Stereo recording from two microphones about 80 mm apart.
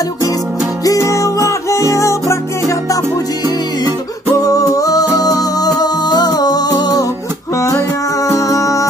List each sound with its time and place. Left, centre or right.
0.8 s music: left
4.4 s music: left
7.5 s music: left